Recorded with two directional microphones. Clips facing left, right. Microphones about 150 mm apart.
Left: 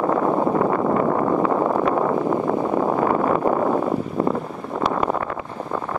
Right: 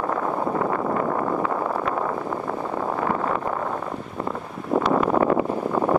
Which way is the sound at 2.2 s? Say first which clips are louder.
Left 7 dB; 50° left (ahead or behind).